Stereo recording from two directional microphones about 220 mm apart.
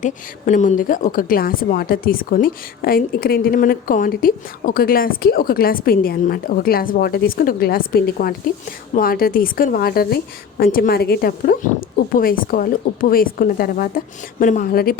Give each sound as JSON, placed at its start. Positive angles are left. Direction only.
{"t": 0.0, "sound": "speech", "side_deg": 35}